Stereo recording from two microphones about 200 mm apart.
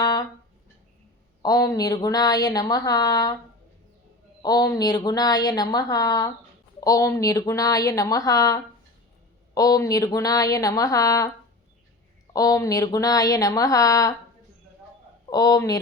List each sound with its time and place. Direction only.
0.0 s a sound: 20° left (ahead or behind)
1.4 s a woman's voice: 20° left (ahead or behind)
4.4 s a woman's voice: 20° left (ahead or behind)
12.3 s a woman's voice: 20° left (ahead or behind)
15.3 s a woman's voice: 20° left (ahead or behind)